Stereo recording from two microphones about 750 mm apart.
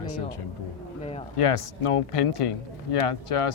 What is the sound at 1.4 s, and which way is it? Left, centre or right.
Speech, left.